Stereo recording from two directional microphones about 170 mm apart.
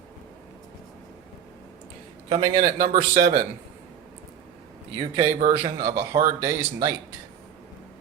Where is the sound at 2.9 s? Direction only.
60° right (ahead or behind).